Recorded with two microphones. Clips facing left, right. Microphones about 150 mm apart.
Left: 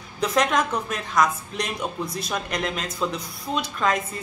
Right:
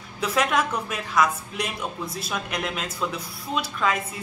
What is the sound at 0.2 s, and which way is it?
A woman's voice, 5° right (ahead or behind).